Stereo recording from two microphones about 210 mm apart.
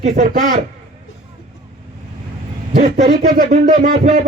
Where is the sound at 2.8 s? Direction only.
35° right (ahead or behind).